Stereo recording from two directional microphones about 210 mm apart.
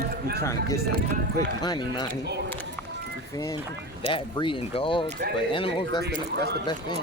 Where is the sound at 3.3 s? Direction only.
15° left (ahead or behind).